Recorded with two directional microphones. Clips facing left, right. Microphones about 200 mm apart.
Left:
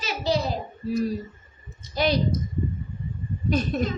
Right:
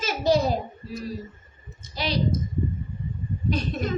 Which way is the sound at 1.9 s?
50° left (ahead or behind).